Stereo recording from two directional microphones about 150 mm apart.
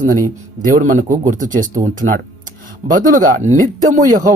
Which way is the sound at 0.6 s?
60° right (ahead or behind).